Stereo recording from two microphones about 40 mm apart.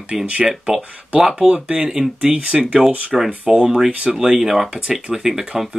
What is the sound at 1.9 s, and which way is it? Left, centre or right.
Speech, centre.